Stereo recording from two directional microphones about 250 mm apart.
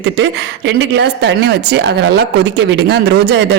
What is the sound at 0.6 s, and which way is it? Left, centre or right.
A woman's voice, right.